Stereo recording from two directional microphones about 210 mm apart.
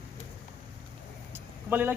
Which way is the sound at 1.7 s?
10° right (ahead or behind).